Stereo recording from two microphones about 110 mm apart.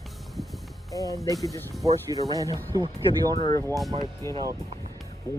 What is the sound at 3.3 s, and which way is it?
Speech, 30° left (ahead or behind).